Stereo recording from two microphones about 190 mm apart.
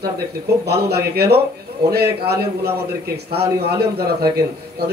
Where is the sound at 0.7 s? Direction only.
60° right (ahead or behind).